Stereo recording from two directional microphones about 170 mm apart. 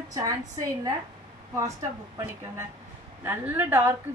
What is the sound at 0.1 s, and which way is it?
Speech, 20° right (ahead or behind).